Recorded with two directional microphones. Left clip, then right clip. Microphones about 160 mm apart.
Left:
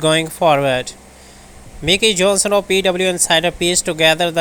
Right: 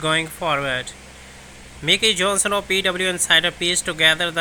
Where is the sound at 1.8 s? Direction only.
30° left (ahead or behind).